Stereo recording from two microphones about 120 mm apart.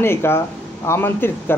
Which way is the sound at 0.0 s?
20° left (ahead or behind).